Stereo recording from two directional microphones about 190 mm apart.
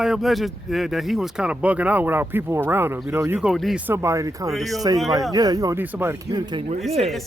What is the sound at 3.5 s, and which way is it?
Speech, centre (ahead or behind).